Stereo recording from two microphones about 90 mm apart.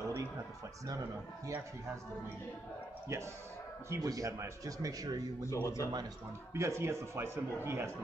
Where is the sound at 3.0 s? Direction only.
30° right (ahead or behind).